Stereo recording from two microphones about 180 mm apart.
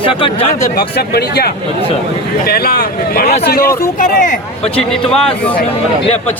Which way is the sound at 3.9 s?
45° left (ahead or behind).